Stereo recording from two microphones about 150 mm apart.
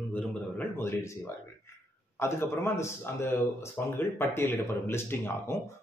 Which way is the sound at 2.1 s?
15° left (ahead or behind).